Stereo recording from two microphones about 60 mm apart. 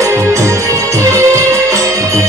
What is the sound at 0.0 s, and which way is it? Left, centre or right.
Music, right.